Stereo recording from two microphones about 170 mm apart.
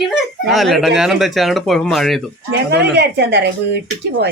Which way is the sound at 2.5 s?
80° right.